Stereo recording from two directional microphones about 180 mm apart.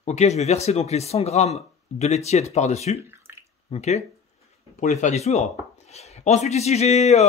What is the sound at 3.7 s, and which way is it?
Speech, 40° left (ahead or behind).